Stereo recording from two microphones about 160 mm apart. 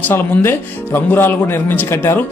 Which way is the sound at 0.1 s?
15° left (ahead or behind).